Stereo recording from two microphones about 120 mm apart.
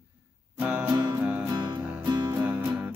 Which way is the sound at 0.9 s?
25° right (ahead or behind).